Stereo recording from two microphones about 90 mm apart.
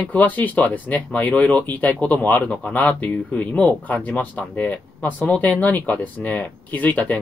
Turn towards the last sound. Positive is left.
turn(degrees=15)  # may be behind; listen again after turning